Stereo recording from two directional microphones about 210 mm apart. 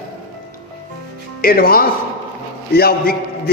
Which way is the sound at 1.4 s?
45° left (ahead or behind).